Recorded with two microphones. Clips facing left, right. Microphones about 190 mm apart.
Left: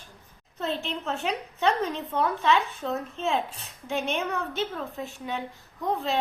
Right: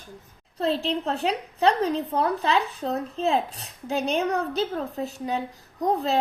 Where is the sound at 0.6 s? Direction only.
35° right (ahead or behind).